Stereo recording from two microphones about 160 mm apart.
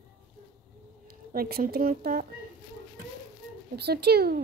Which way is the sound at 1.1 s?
65° right (ahead or behind).